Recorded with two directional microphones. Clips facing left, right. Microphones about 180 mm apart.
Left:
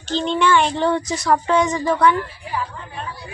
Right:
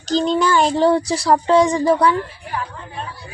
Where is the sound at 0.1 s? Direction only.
40° right (ahead or behind).